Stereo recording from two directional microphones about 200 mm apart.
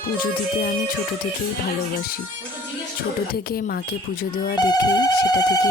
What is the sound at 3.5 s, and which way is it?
Speech, 50° left (ahead or behind).